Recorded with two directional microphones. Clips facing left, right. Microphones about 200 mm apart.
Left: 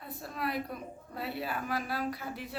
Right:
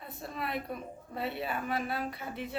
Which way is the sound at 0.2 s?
Centre (ahead or behind).